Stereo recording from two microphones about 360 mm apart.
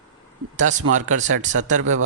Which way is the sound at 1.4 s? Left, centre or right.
Centre.